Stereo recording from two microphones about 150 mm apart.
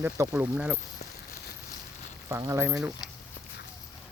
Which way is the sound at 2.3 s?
20° right (ahead or behind).